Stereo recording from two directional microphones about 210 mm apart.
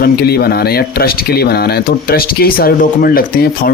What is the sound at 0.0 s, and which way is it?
Speech, 50° left (ahead or behind).